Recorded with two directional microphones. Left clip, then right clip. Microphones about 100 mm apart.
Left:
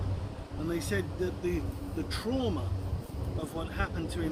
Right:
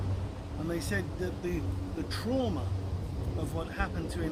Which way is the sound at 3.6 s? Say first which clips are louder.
Even; 30° right (ahead or behind).